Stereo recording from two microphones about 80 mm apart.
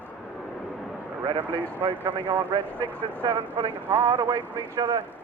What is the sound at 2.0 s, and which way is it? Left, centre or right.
Speech, right.